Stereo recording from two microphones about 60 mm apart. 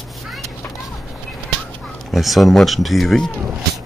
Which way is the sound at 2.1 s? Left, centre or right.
Centre.